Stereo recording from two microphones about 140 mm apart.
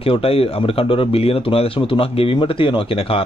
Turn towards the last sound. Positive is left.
turn(degrees=40)  # may be behind; listen again after turning